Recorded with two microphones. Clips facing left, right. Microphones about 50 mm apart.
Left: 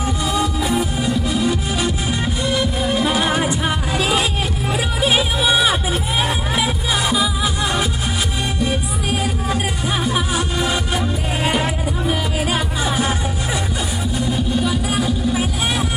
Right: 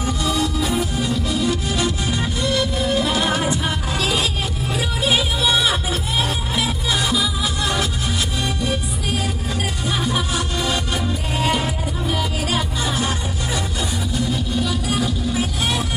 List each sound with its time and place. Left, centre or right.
0.3 s music: centre
14.3 s music: centre